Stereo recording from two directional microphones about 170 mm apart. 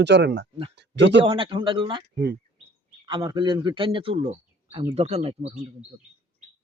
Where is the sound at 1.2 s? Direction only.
30° right (ahead or behind).